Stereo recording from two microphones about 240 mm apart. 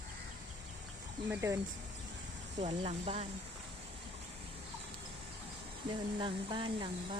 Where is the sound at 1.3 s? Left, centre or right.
Centre.